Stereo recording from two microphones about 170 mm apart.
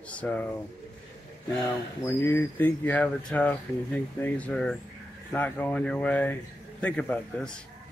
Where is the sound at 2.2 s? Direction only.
10° left (ahead or behind).